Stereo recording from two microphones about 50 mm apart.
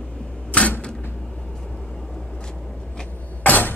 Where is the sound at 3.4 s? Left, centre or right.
Left.